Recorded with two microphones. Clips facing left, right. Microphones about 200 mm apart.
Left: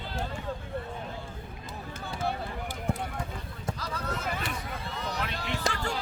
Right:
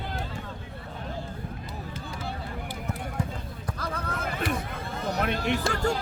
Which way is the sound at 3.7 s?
55° right (ahead or behind).